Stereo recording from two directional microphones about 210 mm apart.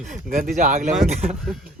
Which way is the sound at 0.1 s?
40° right (ahead or behind).